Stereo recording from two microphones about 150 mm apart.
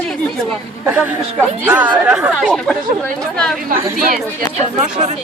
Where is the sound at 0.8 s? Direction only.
10° right (ahead or behind).